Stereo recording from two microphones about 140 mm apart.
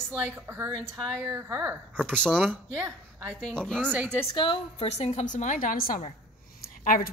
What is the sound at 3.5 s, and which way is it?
Speech, 5° left (ahead or behind).